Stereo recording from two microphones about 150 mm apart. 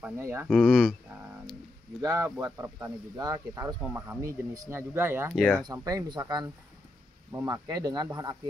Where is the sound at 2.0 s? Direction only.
20° right (ahead or behind).